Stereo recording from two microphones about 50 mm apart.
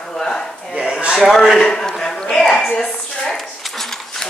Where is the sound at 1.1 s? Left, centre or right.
Centre.